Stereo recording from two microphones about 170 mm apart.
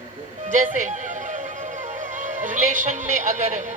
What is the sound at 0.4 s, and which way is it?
Music, 50° right (ahead or behind).